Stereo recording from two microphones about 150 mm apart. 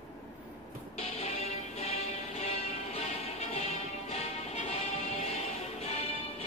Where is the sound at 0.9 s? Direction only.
40° left (ahead or behind).